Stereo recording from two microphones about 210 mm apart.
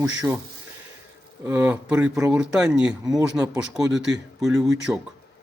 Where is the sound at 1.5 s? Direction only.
10° right (ahead or behind).